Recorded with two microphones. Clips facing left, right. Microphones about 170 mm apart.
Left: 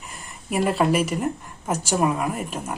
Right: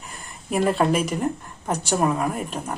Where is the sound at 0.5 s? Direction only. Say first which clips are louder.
Even; centre (ahead or behind).